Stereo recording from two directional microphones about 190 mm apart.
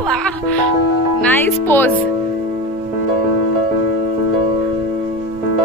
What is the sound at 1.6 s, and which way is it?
Speech, 10° left (ahead or behind).